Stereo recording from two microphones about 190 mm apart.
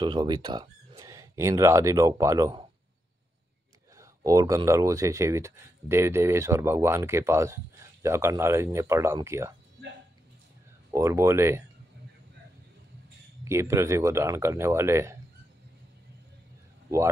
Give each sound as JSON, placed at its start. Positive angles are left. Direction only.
{"t": 0.0, "sound": "speech", "side_deg": -25}
{"t": 3.9, "sound": "speech", "side_deg": -15}
{"t": 10.9, "sound": "speech", "side_deg": -15}
{"t": 13.4, "sound": "speech", "side_deg": -15}